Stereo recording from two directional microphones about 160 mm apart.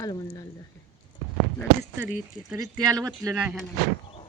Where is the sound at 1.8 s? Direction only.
10° right (ahead or behind).